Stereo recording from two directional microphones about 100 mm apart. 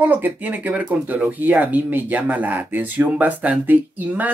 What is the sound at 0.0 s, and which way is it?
Speech, 15° right (ahead or behind).